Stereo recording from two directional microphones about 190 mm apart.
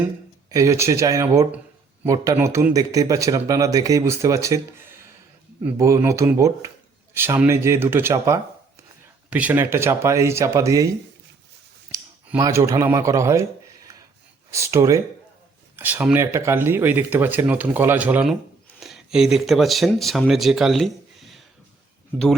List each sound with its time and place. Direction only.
0.5 s speech: 15° right (ahead or behind)
5.6 s speech: 15° right (ahead or behind)
12.4 s speech: 15° right (ahead or behind)
14.5 s speech: 15° right (ahead or behind)